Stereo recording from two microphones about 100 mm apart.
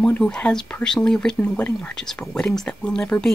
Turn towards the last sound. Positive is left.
turn(degrees=10)  # may be behind; listen again after turning